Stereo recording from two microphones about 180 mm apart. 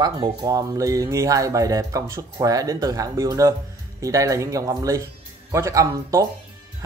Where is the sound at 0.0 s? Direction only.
20° right (ahead or behind).